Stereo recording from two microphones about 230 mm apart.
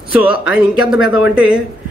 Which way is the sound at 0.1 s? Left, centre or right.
Centre.